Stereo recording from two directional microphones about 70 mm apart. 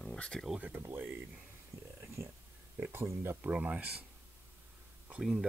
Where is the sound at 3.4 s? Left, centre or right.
Centre.